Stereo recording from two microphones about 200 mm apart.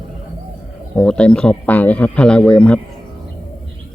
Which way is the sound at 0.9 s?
5° left (ahead or behind).